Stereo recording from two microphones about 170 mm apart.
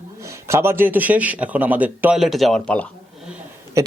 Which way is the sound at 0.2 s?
15° right (ahead or behind).